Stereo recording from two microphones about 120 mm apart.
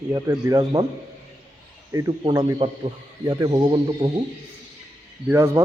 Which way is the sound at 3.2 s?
35° right (ahead or behind).